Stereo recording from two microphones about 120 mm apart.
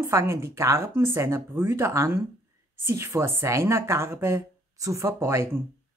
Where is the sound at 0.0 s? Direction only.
25° right (ahead or behind).